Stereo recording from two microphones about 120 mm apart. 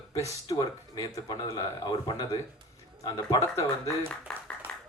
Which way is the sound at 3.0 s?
30° left (ahead or behind).